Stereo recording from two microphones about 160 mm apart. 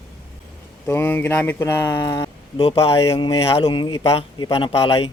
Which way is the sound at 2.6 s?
35° left (ahead or behind).